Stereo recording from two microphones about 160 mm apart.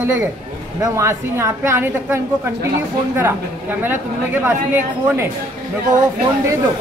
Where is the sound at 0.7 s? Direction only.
20° right (ahead or behind).